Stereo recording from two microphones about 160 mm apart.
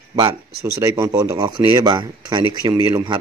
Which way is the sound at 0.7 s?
20° right (ahead or behind).